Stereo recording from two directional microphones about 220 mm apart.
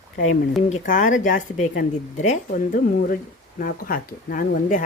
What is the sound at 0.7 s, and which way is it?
Speech, 35° left (ahead or behind).